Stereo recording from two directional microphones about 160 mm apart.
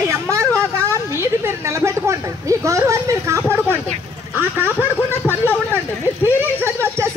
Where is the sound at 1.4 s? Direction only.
15° right (ahead or behind).